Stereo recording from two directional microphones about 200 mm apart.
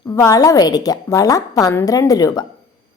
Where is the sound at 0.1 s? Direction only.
15° left (ahead or behind).